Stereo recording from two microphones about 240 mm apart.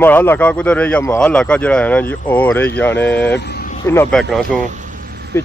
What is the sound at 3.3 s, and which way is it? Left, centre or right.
Speech, left.